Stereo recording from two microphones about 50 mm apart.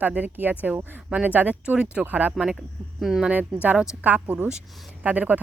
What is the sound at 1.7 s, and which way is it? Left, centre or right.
Speech, centre.